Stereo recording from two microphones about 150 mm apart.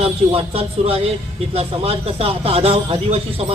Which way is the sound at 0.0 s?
40° right (ahead or behind).